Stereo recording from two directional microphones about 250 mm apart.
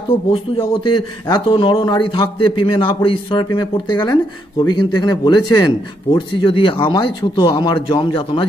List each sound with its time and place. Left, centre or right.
0.6 s a man's voice: centre